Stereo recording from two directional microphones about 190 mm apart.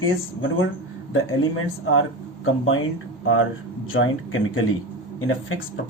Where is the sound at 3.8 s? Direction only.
90° left.